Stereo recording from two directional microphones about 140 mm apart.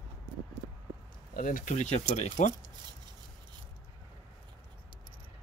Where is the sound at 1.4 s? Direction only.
70° left (ahead or behind); by 2.3 s 55° left (ahead or behind).